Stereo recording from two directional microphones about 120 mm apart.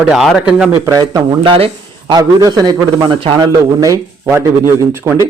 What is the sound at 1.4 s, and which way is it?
Speech, 45° right (ahead or behind).